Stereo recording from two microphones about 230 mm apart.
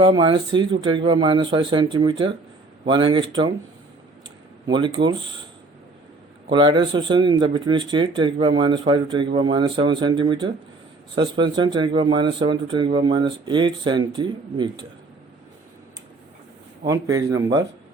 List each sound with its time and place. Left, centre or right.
0.0 s speech: centre
4.6 s speech: centre
6.5 s speech: centre
16.8 s speech: centre